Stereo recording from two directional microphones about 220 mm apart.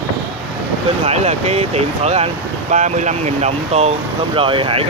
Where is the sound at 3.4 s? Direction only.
30° right (ahead or behind).